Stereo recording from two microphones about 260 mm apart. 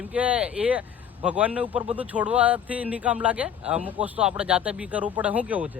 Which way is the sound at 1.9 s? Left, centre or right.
Centre.